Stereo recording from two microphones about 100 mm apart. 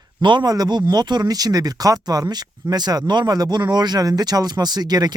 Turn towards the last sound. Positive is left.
turn(degrees=-45)  # may be behind; listen again after turning